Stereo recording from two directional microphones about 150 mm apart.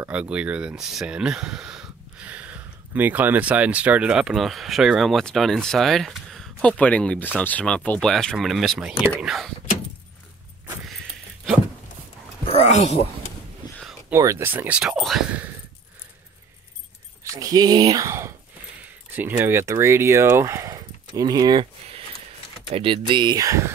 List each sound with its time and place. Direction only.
0.0 s speech: 10° right (ahead or behind)
12.4 s speech: 45° left (ahead or behind)
14.1 s speech: 20° right (ahead or behind)
17.2 s speech: 25° right (ahead or behind)
22.7 s speech: 40° right (ahead or behind); by 23.7 s 20° right (ahead or behind)